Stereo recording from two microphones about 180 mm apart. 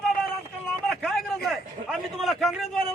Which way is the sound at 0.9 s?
Centre (ahead or behind).